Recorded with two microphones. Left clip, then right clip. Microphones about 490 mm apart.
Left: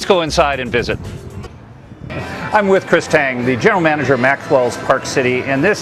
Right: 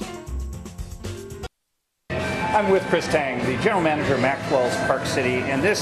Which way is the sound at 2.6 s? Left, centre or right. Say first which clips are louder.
Left 8 dB; left.